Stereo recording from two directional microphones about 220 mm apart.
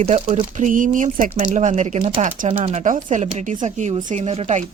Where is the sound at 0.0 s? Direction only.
30° right (ahead or behind).